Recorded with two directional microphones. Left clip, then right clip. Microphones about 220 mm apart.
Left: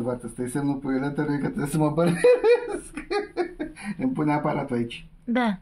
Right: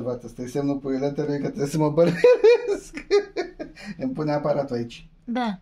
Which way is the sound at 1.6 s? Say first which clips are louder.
Right 4 dB; 35° right (ahead or behind).